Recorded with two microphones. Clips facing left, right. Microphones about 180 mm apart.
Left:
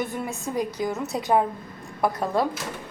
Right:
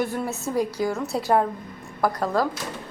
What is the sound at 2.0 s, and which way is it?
Speech, 25° left (ahead or behind).